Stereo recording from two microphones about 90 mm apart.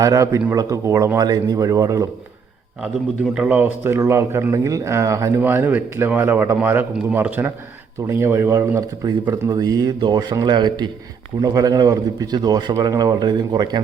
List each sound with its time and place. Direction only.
0.0 s speech: 40° right (ahead or behind)
1.2 s speech: 45° right (ahead or behind)
3.3 s speech: 20° right (ahead or behind)
5.4 s a man's voice: 25° right (ahead or behind)
8.0 s speech: 30° right (ahead or behind)
9.0 s a man's voice: 50° right (ahead or behind)
11.3 s a man's voice: 45° right (ahead or behind)